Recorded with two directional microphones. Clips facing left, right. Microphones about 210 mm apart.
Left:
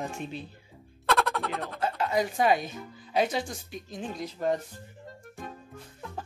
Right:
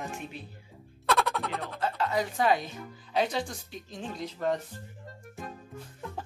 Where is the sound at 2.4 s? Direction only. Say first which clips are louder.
Left 2 dB; 15° left (ahead or behind).